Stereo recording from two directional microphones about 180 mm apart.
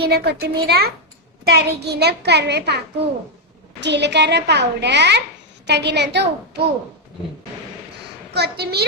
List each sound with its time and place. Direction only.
0.0 s a child's voice: 65° right (ahead or behind)
8.3 s a child's voice: 65° right (ahead or behind)